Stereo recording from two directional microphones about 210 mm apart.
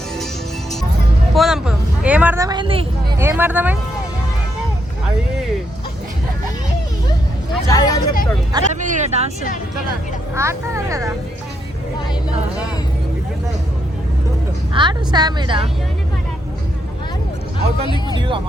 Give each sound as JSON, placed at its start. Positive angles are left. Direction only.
{"t": 1.3, "sound": "speech", "side_deg": 0}
{"t": 3.2, "sound": "speech", "side_deg": -10}
{"t": 7.5, "sound": "speech", "side_deg": 15}
{"t": 8.7, "sound": "speech", "side_deg": -35}
{"t": 10.3, "sound": "speech", "side_deg": -15}
{"t": 14.7, "sound": "a woman's voice", "side_deg": -20}
{"t": 18.1, "sound": "a woman's voice", "side_deg": -25}